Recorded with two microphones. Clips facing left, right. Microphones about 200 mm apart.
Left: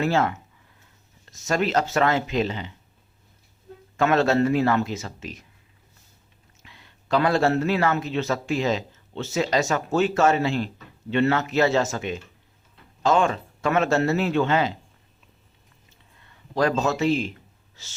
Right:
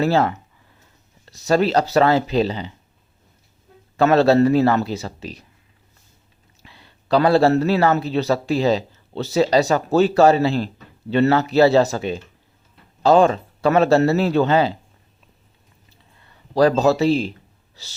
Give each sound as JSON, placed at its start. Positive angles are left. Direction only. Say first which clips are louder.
{"t": 0.0, "sound": "a man's voice", "louder": "right 4 dB", "side_deg": -35}
{"t": 3.9, "sound": "a man's voice", "louder": "right 6 dB", "side_deg": -35}
{"t": 6.6, "sound": "a man's voice", "louder": "right 4 dB", "side_deg": -35}
{"t": 15.9, "sound": "a sound", "louder": "right 3 dB", "side_deg": -35}
{"t": 17.8, "sound": "a man's voice", "louder": "right 4 dB", "side_deg": -35}